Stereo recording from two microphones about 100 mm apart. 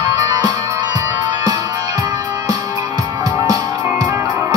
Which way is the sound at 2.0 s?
40° right (ahead or behind).